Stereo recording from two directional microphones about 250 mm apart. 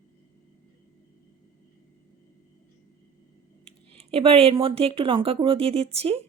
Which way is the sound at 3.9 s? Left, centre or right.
Right.